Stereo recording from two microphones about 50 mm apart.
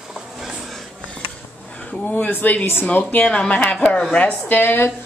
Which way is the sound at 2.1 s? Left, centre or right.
Left.